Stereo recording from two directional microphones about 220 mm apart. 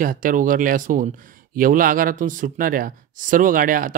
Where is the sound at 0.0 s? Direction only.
40° right (ahead or behind).